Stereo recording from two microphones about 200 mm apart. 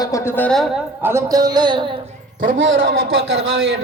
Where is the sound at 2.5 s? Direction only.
70° right (ahead or behind).